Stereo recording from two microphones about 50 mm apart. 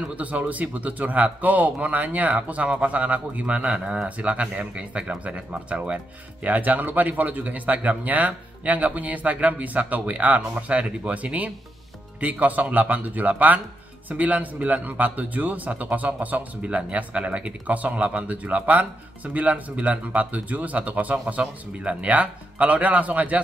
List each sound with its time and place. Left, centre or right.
0.1 s a man's voice: right